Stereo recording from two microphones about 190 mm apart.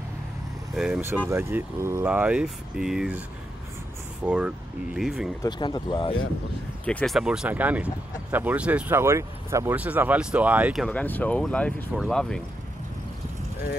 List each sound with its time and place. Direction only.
0.7 s speech: 5° right (ahead or behind)
4.2 s speech: 5° right (ahead or behind)
5.4 s speech: 25° left (ahead or behind)
6.9 s speech: 5° left (ahead or behind)